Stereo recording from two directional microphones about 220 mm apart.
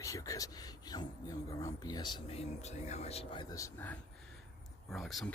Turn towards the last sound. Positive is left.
turn(degrees=0)  # may be behind; listen again after turning